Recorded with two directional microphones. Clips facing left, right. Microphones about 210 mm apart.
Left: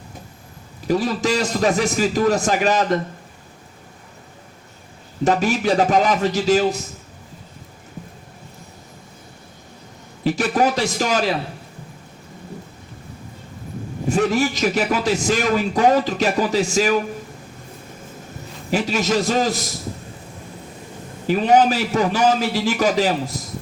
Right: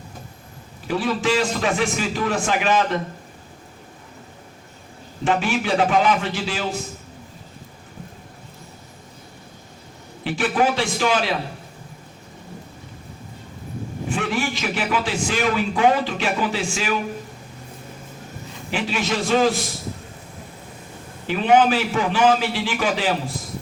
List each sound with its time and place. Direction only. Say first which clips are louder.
0.9 s a man's voice: left 2 dB; 40° left (ahead or behind)
5.2 s a man's voice: left 3 dB; 40° left (ahead or behind)
10.2 s a man's voice: left 2 dB; 40° left (ahead or behind)
14.1 s a man's voice: left 6 dB; 40° left (ahead or behind)
18.7 s a man's voice: left 4 dB; 40° left (ahead or behind)
21.2 s a man's voice: left 1 dB; 40° left (ahead or behind)